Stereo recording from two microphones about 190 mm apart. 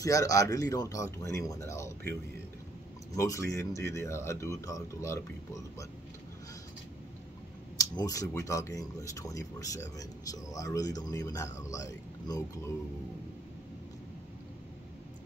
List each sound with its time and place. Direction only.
0.0 s speech: 15° left (ahead or behind)
3.2 s speech: 15° left (ahead or behind)
7.7 s speech: 20° left (ahead or behind)